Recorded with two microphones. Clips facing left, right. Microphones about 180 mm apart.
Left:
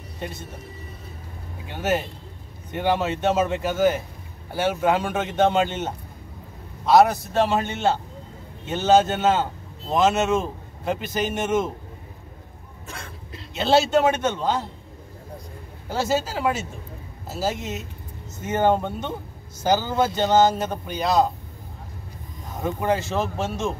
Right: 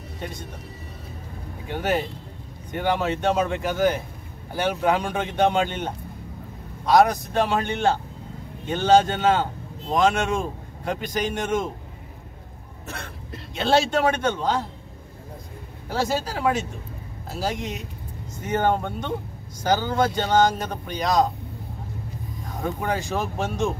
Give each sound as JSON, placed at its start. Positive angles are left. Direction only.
{"t": 0.2, "sound": "speech", "side_deg": 5}
{"t": 1.8, "sound": "a man's voice", "side_deg": 5}
{"t": 8.6, "sound": "a man's voice", "side_deg": 5}
{"t": 13.6, "sound": "a man's voice", "side_deg": 5}
{"t": 15.9, "sound": "a man's voice", "side_deg": 5}
{"t": 22.6, "sound": "speech", "side_deg": 5}
{"t": 23.1, "sound": "speech", "side_deg": -15}